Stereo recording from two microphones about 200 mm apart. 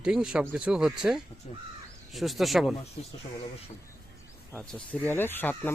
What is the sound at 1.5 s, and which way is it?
Speech, 30° left (ahead or behind).